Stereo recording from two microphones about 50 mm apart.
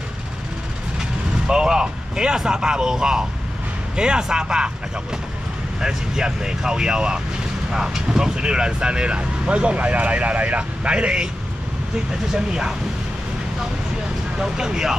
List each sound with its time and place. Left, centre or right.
1.5 s speech: centre
5.8 s speech: centre
14.4 s speech: centre